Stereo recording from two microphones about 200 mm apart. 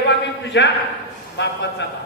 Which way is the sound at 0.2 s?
60° left (ahead or behind).